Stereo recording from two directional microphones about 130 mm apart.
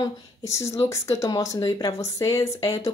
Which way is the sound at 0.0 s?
25° left (ahead or behind).